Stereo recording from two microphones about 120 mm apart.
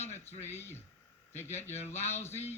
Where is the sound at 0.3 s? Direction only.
20° left (ahead or behind).